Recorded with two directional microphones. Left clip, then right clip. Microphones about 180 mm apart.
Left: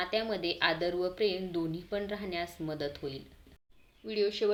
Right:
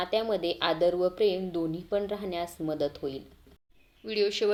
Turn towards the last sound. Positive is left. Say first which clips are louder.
# right 3 dB
turn(degrees=-20)  # may be behind; listen again after turning